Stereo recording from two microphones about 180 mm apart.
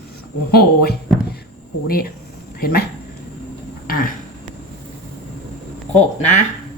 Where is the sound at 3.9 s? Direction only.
50° left (ahead or behind).